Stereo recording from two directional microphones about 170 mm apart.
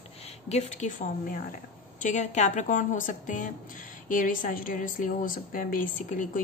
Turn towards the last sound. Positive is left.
turn(degrees=50)  # may be behind; listen again after turning